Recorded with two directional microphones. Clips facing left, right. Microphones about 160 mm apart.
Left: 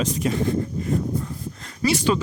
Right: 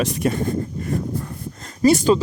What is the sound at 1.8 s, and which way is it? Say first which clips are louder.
Speech: right 6 dB; 40° right (ahead or behind).